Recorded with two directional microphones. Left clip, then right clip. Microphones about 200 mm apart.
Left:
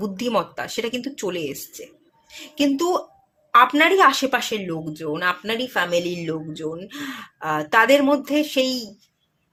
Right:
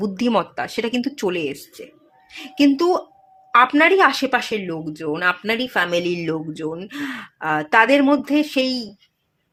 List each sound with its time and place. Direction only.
0.0 s speech: 20° right (ahead or behind)